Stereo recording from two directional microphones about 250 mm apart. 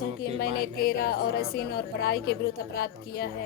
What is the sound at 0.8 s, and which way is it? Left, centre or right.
Speech, left.